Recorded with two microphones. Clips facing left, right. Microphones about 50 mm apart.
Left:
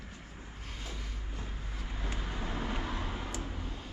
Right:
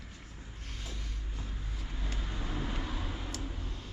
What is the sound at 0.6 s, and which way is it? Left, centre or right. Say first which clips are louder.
Vehicle: left 1 dB; centre.